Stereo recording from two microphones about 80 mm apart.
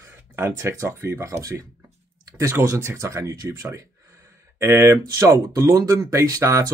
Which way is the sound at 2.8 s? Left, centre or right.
Right.